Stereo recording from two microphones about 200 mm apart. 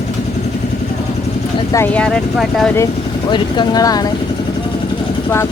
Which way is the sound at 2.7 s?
20° left (ahead or behind).